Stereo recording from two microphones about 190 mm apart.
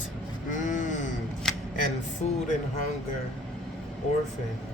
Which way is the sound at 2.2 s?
35° left (ahead or behind).